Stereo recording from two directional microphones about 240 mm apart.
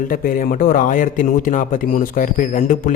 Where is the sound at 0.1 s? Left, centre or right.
Left.